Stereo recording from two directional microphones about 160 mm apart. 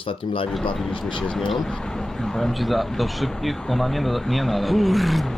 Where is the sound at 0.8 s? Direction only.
5° left (ahead or behind).